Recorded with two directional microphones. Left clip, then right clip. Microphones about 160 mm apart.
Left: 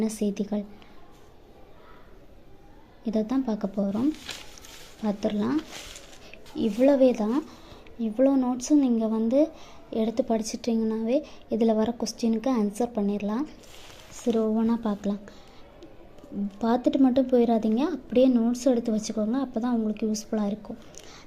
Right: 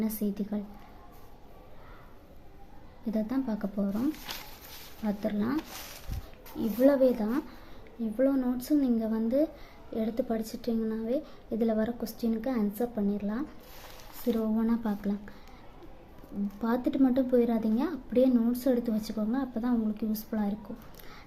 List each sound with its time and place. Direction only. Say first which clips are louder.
0.0 s a woman's voice: left 5 dB; 20° left (ahead or behind)
3.1 s a woman's voice: left 5 dB; 20° left (ahead or behind)
5.0 s a woman's voice: left 4 dB; 20° left (ahead or behind)
6.6 s a woman's voice: left 3 dB; 15° left (ahead or behind)
16.6 s a woman's voice: left 5 dB; 15° left (ahead or behind)